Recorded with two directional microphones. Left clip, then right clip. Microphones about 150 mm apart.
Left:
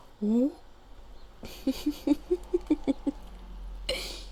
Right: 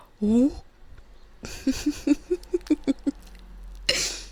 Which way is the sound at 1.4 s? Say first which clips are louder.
Right 4 dB; 35° right (ahead or behind).